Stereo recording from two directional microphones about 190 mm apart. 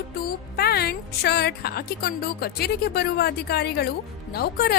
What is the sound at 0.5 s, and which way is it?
A woman's voice, 55° left (ahead or behind).